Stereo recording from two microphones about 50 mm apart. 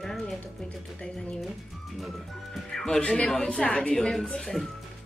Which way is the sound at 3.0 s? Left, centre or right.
Left.